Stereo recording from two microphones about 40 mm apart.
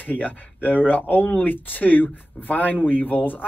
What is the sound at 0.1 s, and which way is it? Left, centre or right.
Speech, left.